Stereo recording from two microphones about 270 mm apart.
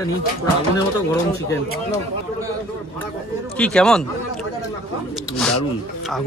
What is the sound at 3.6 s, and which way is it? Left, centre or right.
Speech, centre.